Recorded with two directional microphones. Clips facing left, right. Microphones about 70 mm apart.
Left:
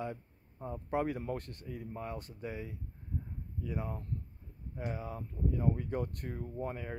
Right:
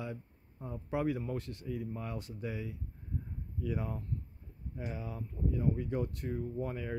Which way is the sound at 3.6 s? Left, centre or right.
Left.